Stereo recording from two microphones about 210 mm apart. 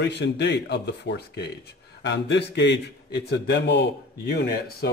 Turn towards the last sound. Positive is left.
turn(degrees=50)  # may be behind; listen again after turning